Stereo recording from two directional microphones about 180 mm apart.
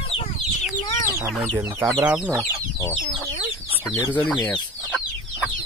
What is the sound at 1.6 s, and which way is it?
Speech, 15° right (ahead or behind).